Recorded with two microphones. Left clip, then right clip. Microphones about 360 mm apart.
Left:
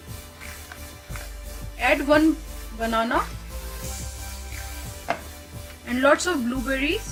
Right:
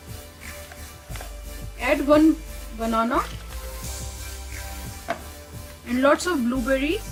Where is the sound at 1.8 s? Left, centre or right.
Centre.